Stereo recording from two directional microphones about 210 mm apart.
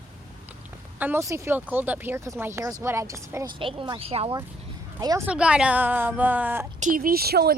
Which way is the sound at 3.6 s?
25° right (ahead or behind).